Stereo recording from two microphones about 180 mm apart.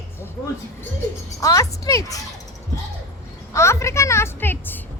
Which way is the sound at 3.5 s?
15° left (ahead or behind).